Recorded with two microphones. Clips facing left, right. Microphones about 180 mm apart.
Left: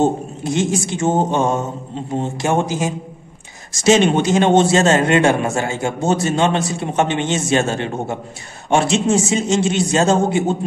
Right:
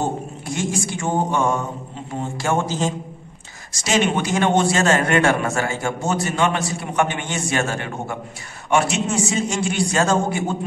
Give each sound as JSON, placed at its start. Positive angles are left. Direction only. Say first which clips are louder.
{"t": 0.0, "sound": "a man's voice", "louder": "left 7 dB", "side_deg": 20}